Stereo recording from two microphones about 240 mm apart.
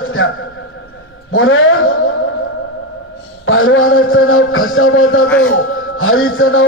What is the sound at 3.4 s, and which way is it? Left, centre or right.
A man's voice, left.